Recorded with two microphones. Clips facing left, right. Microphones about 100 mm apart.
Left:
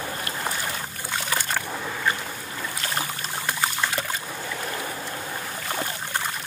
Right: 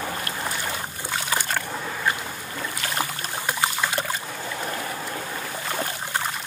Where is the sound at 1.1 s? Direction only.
10° right (ahead or behind).